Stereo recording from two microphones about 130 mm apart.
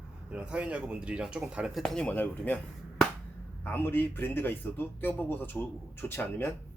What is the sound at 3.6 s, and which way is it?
Speech, 15° left (ahead or behind).